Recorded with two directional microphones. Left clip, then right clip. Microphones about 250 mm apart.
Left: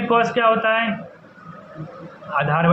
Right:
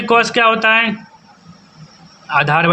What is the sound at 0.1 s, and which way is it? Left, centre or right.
Speech, right.